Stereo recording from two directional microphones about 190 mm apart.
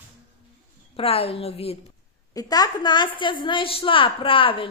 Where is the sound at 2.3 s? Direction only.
20° left (ahead or behind).